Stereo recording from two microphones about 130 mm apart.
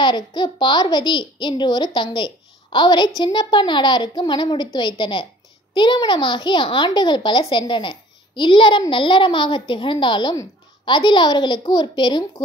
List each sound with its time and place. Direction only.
0.0 s a child's voice: 35° left (ahead or behind)